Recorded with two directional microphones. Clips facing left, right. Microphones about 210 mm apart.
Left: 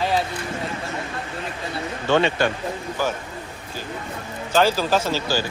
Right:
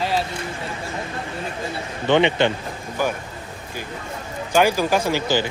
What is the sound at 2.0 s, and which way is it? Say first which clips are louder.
Speech: right 2 dB; 20° right (ahead or behind).